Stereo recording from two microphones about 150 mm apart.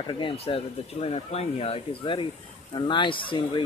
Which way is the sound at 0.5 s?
35° left (ahead or behind).